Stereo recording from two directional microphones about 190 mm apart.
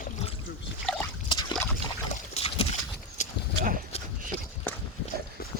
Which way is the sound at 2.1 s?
40° left (ahead or behind).